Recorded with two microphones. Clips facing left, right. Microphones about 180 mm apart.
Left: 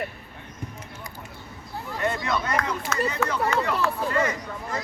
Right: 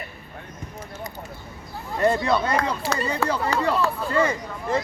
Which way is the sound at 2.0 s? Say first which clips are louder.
Right 6 dB; 35° right (ahead or behind).